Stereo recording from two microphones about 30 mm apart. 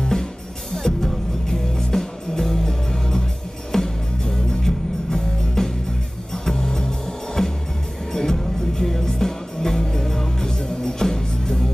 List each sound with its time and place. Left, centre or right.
0.7 s music: centre